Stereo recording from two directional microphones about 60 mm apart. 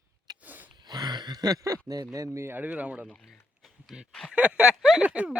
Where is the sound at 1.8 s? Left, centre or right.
Right.